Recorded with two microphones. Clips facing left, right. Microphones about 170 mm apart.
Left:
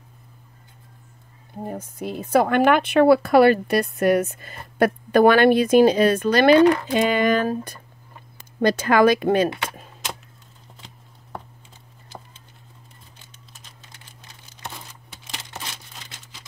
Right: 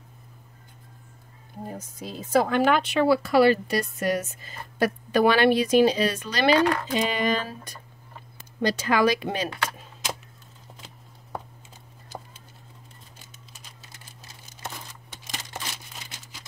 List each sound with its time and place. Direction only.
1.7 s a woman's voice: 60° left (ahead or behind)